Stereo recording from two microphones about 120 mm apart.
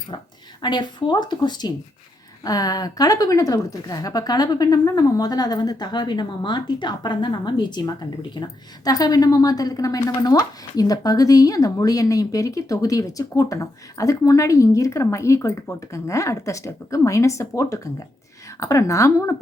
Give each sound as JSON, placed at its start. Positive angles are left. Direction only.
{"t": 0.6, "sound": "a woman's voice", "side_deg": 40}